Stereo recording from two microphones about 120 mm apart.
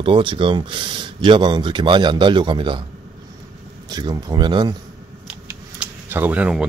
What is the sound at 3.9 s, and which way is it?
Speech, 35° right (ahead or behind).